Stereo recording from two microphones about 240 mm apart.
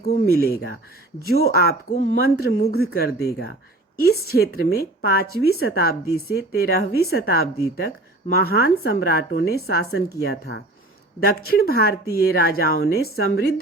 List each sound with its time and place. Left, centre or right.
0.3 s speech: left